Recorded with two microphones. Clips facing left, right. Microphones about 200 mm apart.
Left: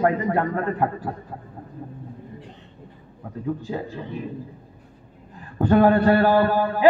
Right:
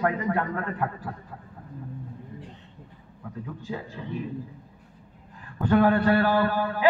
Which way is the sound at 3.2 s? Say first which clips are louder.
Left 9 dB; 35° left (ahead or behind).